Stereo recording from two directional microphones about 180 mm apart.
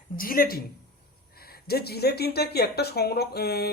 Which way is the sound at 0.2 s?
55° left (ahead or behind).